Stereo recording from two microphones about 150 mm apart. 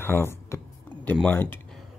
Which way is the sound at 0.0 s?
15° left (ahead or behind).